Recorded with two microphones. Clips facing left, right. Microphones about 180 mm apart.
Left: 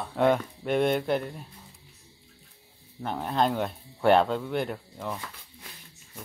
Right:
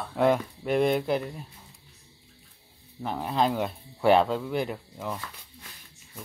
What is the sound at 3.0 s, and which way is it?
Speech, centre (ahead or behind).